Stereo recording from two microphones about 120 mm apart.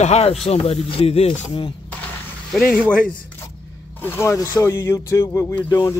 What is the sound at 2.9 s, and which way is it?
Speech, 10° left (ahead or behind).